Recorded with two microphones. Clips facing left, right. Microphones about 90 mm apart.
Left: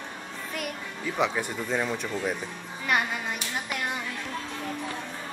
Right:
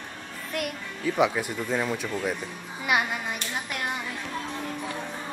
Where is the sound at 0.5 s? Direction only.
Centre (ahead or behind).